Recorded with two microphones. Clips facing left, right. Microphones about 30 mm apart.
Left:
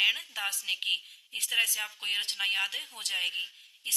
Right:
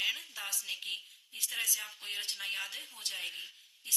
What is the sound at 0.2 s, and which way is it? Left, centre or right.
A woman's voice, left.